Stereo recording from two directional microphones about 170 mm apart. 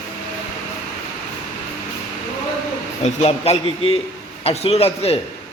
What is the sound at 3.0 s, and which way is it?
A man's voice, 40° left (ahead or behind).